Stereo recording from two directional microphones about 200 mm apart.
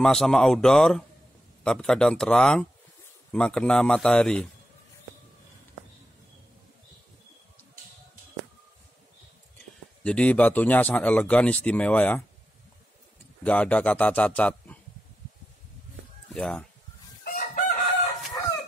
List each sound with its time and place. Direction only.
0.0 s a man's voice: centre (ahead or behind)
10.0 s speech: 5° left (ahead or behind)
13.4 s speech: 5° left (ahead or behind)
16.3 s a man's voice: 5° left (ahead or behind)
17.2 s chicken: 50° left (ahead or behind)